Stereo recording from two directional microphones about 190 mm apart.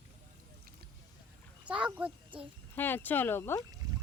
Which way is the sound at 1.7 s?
5° right (ahead or behind).